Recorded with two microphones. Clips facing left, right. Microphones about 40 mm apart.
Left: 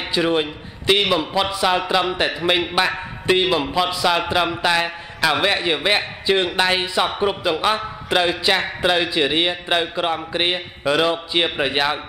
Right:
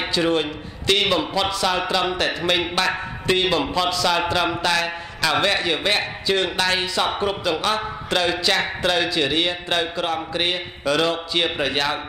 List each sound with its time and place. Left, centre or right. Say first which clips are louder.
0.1 s a man's voice: left 3 dB; centre